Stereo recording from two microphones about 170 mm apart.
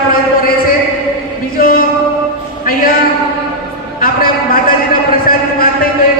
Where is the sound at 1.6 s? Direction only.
55° left (ahead or behind).